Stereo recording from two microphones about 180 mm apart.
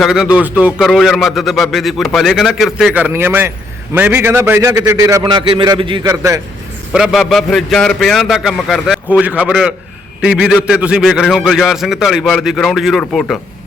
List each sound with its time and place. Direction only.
0.0 s a man's voice: 5° right (ahead or behind)
6.9 s a man's voice: centre (ahead or behind)